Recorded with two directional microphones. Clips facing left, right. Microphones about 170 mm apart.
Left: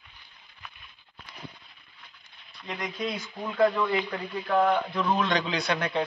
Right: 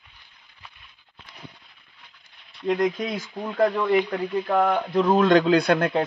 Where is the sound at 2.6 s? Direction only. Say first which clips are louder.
Right 10 dB; 50° right (ahead or behind).